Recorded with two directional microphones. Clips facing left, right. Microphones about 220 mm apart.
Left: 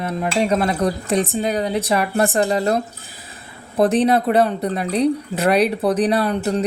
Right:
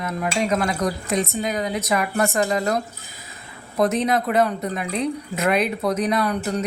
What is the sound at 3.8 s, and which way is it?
Speech, 30° left (ahead or behind).